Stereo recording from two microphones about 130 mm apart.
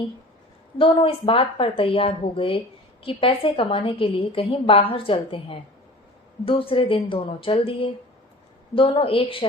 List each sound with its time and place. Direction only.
0.8 s a woman's voice: 40° left (ahead or behind)